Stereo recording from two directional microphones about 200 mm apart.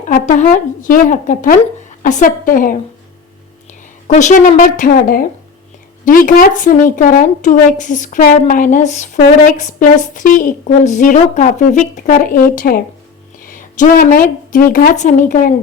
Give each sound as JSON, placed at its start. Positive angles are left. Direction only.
{"t": 0.1, "sound": "a woman's voice", "side_deg": 40}
{"t": 4.0, "sound": "a woman's voice", "side_deg": 35}